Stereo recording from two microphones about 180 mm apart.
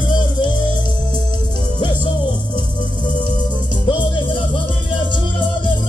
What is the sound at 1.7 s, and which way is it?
Music, 25° left (ahead or behind).